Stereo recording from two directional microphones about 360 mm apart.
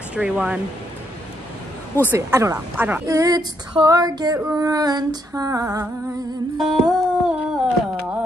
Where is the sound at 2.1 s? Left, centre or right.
Centre.